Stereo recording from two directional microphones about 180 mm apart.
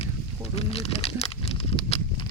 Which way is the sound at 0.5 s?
35° left (ahead or behind).